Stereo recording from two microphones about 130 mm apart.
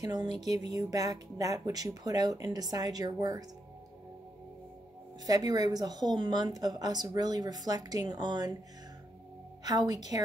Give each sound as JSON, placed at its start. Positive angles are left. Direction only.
{"t": 0.0, "sound": "speech", "side_deg": -35}
{"t": 5.2, "sound": "speech", "side_deg": -30}
{"t": 9.6, "sound": "a woman's voice", "side_deg": -30}